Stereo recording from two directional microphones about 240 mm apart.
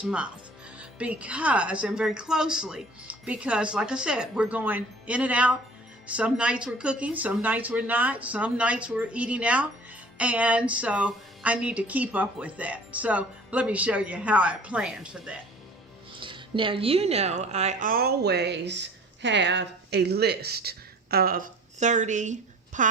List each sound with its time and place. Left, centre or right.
0.0 s a woman's voice: centre
16.2 s speech: right